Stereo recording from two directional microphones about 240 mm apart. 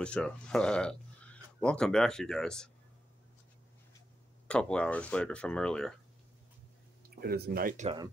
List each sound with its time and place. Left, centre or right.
0.0 s speech: centre
4.5 s speech: centre
7.2 s speech: right